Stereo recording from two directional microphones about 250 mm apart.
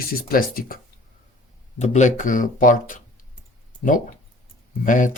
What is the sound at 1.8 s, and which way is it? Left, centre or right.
Speech, left.